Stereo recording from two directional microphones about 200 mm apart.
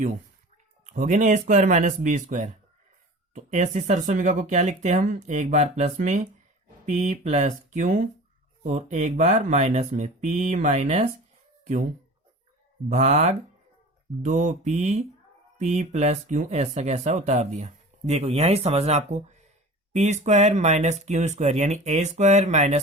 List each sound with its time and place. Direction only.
0.9 s speech: 40° right (ahead or behind)
12.9 s speech: 35° right (ahead or behind)